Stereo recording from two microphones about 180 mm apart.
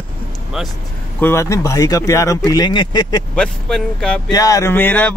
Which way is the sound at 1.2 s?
15° left (ahead or behind).